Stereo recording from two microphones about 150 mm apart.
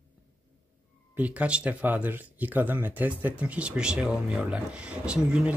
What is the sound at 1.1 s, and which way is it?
Speech, 10° right (ahead or behind).